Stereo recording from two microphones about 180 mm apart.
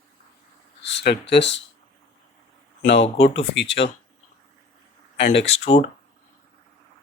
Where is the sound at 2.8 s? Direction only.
80° left.